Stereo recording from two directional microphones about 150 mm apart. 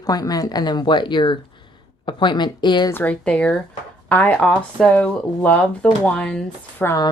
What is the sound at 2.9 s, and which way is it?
Speech, 10° left (ahead or behind).